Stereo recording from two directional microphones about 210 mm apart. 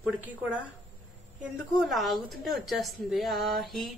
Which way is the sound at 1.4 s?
Centre (ahead or behind).